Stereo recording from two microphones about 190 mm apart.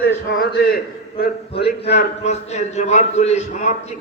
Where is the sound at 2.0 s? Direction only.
35° left (ahead or behind).